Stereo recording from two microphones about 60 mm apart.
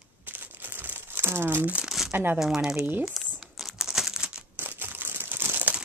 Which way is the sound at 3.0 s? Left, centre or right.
Centre.